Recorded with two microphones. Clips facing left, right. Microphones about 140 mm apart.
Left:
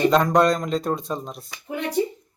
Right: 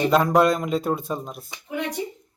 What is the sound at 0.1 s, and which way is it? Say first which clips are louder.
Speech: even; 5° right (ahead or behind).